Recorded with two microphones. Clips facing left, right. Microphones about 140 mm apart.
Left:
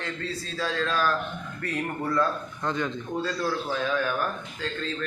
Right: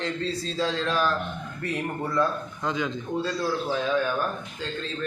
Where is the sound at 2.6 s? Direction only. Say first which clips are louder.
Even; centre (ahead or behind).